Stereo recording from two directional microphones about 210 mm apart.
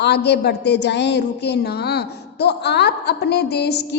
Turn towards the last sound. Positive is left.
turn(degrees=50)  # may be behind; listen again after turning